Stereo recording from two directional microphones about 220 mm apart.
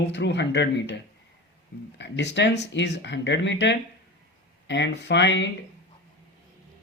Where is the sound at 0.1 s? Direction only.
50° left (ahead or behind).